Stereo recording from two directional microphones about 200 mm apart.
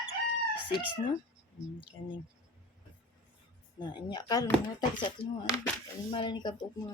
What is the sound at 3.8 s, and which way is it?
Speech, 20° left (ahead or behind).